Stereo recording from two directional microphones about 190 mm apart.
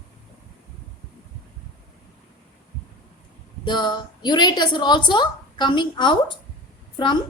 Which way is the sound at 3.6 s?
25° left (ahead or behind).